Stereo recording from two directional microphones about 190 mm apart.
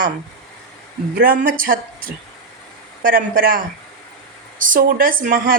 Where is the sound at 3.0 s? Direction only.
50° right (ahead or behind).